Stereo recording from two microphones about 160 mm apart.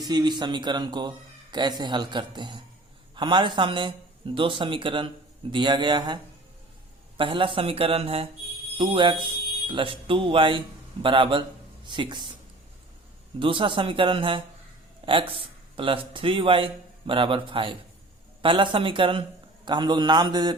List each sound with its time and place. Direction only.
0.0 s a man's voice: 25° right (ahead or behind)
7.2 s a man's voice: 30° right (ahead or behind)
13.4 s a man's voice: 30° right (ahead or behind)